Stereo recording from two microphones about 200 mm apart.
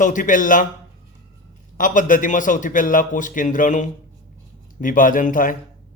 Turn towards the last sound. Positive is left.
turn(degrees=40)  # may be behind; listen again after turning